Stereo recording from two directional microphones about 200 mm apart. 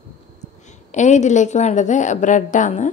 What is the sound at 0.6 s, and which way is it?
A woman's voice, 35° left (ahead or behind).